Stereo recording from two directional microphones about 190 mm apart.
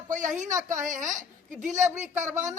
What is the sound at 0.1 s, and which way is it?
A woman's voice, 40° right (ahead or behind).